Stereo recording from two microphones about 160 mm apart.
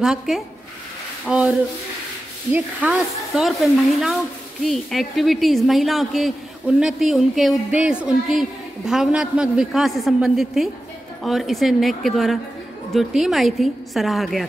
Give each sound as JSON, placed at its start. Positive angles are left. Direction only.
{"t": 0.0, "sound": "speech", "side_deg": -5}